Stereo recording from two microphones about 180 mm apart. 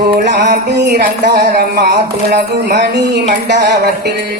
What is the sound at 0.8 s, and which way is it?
Speech, 65° right (ahead or behind).